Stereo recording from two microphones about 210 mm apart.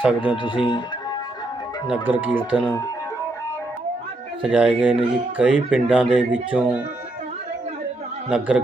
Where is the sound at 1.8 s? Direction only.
10° right (ahead or behind).